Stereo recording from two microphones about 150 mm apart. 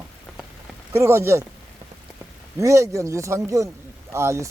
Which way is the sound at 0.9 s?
15° right (ahead or behind).